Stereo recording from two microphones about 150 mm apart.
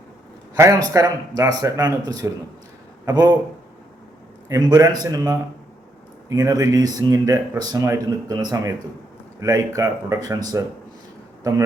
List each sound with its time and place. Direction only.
0.5 s speech: 20° right (ahead or behind)
4.4 s speech: 25° right (ahead or behind)